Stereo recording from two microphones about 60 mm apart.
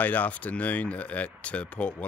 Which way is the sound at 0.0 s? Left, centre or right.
Left.